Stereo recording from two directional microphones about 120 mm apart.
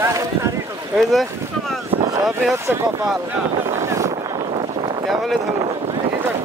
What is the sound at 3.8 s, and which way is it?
Vehicle, 25° right (ahead or behind).